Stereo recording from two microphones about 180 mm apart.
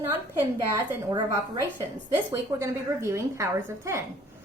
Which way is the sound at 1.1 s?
15° right (ahead or behind).